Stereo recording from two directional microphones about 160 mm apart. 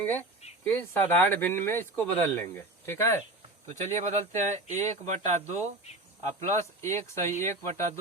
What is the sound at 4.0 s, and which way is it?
Speech, 45° right (ahead or behind).